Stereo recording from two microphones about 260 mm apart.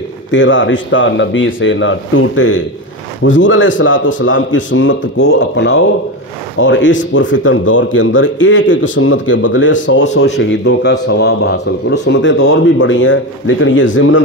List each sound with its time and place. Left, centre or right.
0.3 s a man's voice: left